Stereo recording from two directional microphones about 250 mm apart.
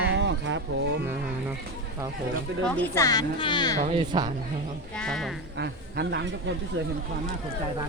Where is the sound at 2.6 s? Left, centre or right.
Centre.